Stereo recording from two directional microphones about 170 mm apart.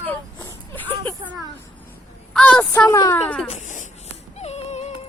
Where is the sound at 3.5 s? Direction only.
45° left (ahead or behind).